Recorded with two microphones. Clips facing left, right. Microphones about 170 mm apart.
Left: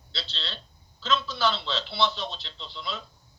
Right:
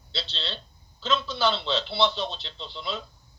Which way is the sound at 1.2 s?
25° right (ahead or behind).